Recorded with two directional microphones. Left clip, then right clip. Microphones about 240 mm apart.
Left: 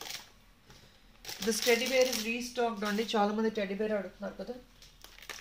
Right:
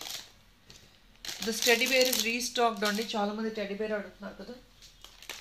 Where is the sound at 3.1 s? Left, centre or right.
Left.